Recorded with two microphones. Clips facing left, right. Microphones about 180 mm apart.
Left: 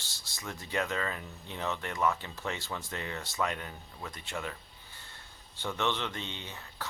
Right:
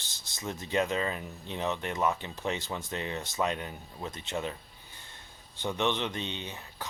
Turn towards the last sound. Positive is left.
turn(degrees=-20)  # may be behind; listen again after turning